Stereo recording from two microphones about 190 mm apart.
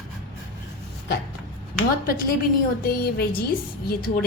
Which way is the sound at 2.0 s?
50° left (ahead or behind).